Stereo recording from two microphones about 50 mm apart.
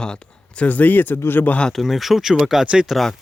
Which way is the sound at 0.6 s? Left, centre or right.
Left.